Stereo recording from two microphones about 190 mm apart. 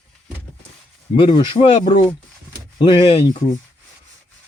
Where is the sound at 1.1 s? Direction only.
25° left (ahead or behind).